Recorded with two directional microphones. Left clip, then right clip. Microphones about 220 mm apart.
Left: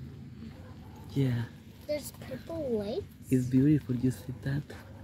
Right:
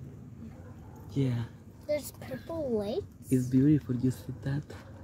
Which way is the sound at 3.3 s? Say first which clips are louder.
Even; centre (ahead or behind).